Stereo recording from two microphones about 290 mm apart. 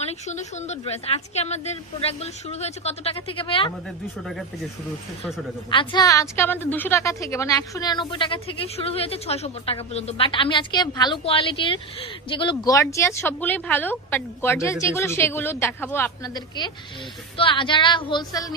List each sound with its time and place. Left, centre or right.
0.0 s a woman's voice: left
5.7 s a woman's voice: centre